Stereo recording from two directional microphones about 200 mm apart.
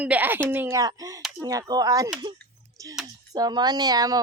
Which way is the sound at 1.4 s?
20° right (ahead or behind).